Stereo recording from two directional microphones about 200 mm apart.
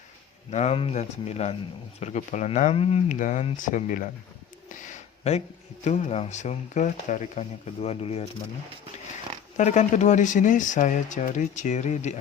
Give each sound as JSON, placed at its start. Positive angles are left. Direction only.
{"t": 0.5, "sound": "speech", "side_deg": 35}
{"t": 4.7, "sound": "a sound", "side_deg": 40}
{"t": 5.8, "sound": "speech", "side_deg": 35}
{"t": 9.6, "sound": "speech", "side_deg": 35}